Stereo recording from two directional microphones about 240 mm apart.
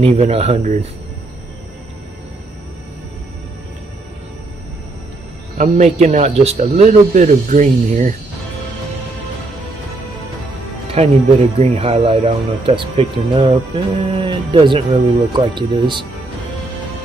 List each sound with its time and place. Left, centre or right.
0.0 s speech: right
5.6 s speech: right
11.0 s speech: right